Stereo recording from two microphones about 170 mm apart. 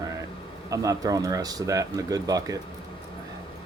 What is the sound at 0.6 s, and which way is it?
Speech, 20° right (ahead or behind).